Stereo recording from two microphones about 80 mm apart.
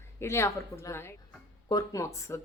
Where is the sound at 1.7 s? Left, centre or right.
Left.